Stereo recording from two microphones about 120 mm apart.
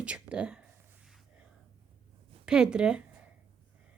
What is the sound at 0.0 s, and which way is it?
Whispering, 10° right (ahead or behind).